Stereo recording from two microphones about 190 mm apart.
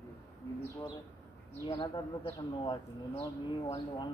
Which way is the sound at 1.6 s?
20° left (ahead or behind).